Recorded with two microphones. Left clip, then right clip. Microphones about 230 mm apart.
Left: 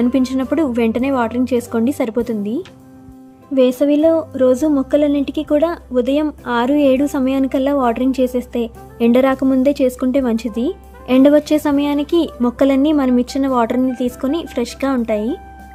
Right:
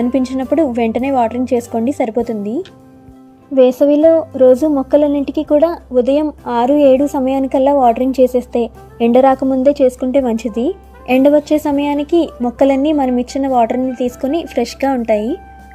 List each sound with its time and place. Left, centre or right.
0.0 s a woman's voice: centre
3.8 s speech: centre
5.2 s speech: left
5.5 s a woman's voice: centre
11.2 s a woman's voice: centre